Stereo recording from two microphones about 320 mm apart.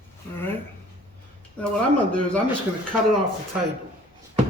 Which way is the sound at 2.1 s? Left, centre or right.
Centre.